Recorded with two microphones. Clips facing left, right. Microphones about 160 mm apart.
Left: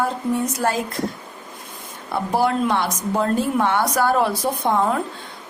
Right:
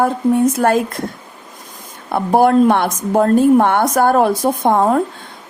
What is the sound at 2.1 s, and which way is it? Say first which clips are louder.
A woman's voice: right 8 dB; 55° right (ahead or behind).